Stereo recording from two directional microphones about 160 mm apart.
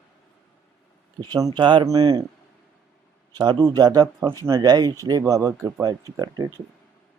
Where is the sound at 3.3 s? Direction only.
25° right (ahead or behind).